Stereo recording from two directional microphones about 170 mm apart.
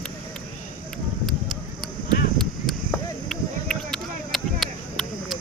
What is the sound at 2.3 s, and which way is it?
Chop, 5° left (ahead or behind).